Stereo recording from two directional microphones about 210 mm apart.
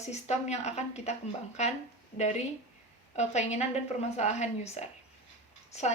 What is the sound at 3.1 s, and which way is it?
A woman's voice, 30° left (ahead or behind).